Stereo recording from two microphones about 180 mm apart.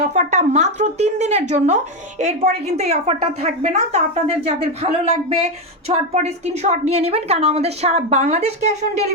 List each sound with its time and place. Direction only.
0.1 s speech: 40° right (ahead or behind)